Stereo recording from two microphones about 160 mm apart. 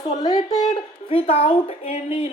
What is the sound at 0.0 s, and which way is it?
A child's voice, 25° left (ahead or behind).